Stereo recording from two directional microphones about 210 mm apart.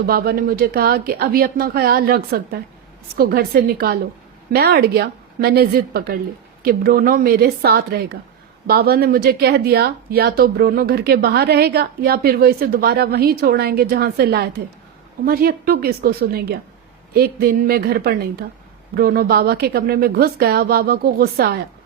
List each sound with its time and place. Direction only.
0.0 s speech: 45° right (ahead or behind)